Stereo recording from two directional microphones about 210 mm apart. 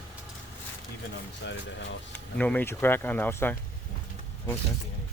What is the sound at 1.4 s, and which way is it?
Speech, 55° left (ahead or behind).